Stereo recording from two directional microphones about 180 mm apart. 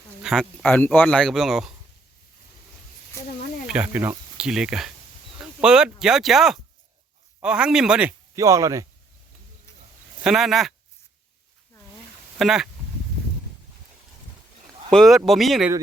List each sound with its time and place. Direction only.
0.2 s speech: centre (ahead or behind)
3.7 s speech: 5° right (ahead or behind)
8.4 s speech: 15° right (ahead or behind)
10.2 s speech: centre (ahead or behind)
12.4 s speech: centre (ahead or behind)
14.8 s speech: centre (ahead or behind)